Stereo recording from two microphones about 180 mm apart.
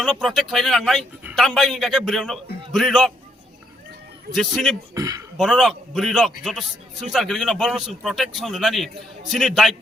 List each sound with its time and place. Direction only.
0.0 s a man's voice: centre (ahead or behind)
4.4 s a man's voice: centre (ahead or behind)
4.9 s a sound: 20° right (ahead or behind)
5.4 s a man's voice: centre (ahead or behind)